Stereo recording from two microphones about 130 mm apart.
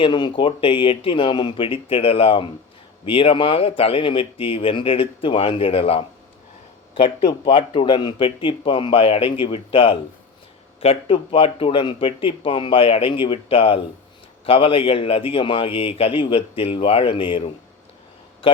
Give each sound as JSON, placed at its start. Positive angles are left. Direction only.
{"t": 0.0, "sound": "speech", "side_deg": 35}